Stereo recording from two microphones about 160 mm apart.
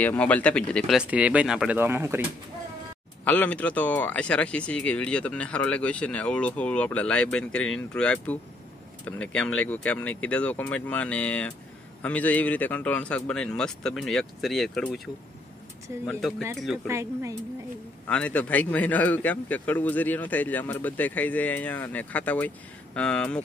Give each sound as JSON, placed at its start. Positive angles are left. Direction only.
{"t": 0.0, "sound": "speech", "side_deg": 10}
{"t": 3.3, "sound": "speech", "side_deg": 10}
{"t": 16.1, "sound": "speech", "side_deg": 5}
{"t": 16.8, "sound": "speech", "side_deg": -15}
{"t": 18.0, "sound": "speech", "side_deg": 10}